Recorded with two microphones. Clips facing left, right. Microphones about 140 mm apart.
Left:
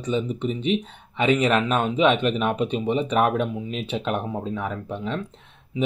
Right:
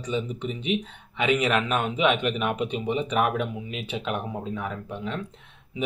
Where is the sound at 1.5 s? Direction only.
30° left (ahead or behind).